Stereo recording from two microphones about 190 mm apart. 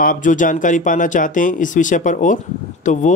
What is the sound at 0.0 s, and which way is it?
Speech, 45° left (ahead or behind).